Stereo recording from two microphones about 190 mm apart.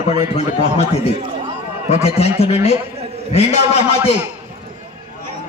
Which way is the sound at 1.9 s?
35° left (ahead or behind).